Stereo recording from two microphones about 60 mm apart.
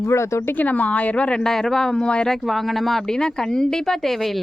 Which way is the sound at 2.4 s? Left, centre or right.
Centre.